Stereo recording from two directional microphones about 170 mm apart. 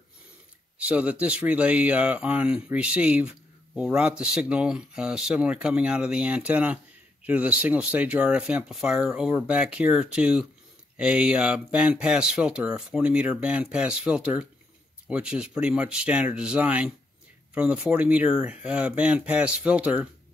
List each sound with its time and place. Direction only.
0.7 s speech: 10° right (ahead or behind)